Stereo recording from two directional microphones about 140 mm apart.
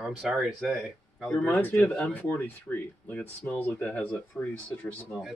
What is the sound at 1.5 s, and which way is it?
Speech, 15° left (ahead or behind).